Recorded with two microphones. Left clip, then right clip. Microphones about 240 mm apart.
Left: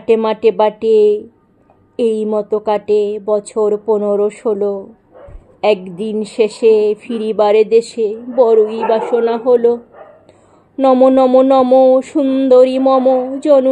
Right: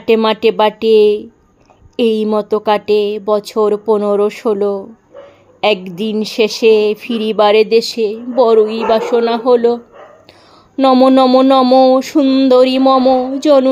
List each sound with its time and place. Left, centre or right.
0.0 s speech: right
10.8 s speech: right